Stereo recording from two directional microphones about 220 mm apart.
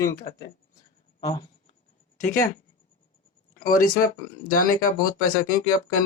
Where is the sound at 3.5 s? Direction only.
40° left (ahead or behind).